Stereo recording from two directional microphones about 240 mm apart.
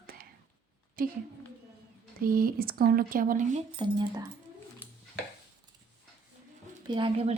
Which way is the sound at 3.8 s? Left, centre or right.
Centre.